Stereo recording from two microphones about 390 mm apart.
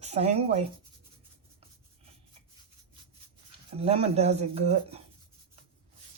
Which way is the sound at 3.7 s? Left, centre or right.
Centre.